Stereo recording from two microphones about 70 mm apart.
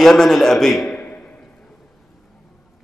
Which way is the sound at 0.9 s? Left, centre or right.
Centre.